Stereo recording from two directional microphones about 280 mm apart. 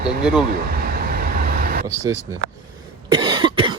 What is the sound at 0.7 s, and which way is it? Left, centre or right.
Vehicle, right.